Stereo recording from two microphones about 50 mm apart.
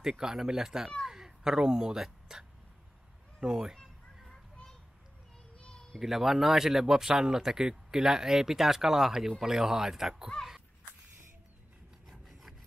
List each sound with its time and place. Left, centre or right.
0.0 s speech: centre
1.0 s a sound: centre
3.3 s speech: centre
4.3 s children playing: centre
5.6 s a sound: centre
5.9 s speech: centre
12.1 s filing: centre